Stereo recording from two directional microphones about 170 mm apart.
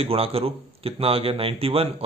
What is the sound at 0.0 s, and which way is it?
A man's voice, 35° right (ahead or behind).